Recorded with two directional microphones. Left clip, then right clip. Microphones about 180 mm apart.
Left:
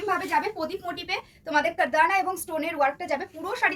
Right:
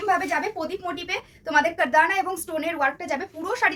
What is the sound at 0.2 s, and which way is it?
A woman's voice, 20° right (ahead or behind).